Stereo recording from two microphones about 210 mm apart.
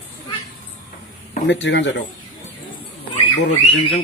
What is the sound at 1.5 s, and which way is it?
Speech, 60° left (ahead or behind).